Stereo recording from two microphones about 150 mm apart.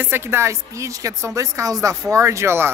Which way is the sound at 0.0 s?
15° right (ahead or behind).